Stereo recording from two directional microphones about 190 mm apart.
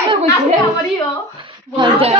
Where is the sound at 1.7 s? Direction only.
25° right (ahead or behind).